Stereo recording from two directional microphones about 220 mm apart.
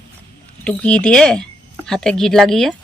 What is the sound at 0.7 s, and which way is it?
Speech, 5° left (ahead or behind).